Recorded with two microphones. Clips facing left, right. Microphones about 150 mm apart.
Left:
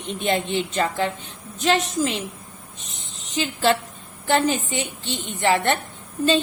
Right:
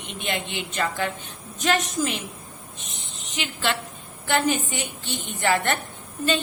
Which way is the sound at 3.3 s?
35° left (ahead or behind).